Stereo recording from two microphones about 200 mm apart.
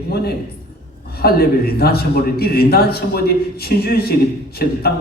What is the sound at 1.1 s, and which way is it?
A man's voice, 50° left (ahead or behind).